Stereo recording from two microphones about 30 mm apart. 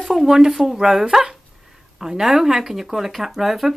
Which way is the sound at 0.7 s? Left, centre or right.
Centre.